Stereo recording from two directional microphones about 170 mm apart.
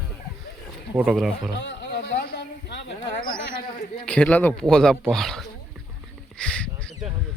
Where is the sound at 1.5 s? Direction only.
90° left.